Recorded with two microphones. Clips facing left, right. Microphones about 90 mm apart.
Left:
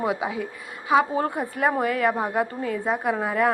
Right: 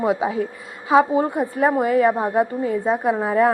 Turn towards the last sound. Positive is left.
turn(degrees=-25)  # may be behind; listen again after turning